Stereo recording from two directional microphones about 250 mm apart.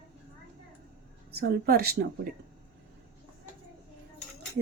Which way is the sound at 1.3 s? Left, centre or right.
Right.